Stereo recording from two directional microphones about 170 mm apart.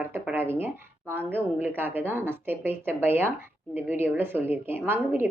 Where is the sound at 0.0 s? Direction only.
10° right (ahead or behind).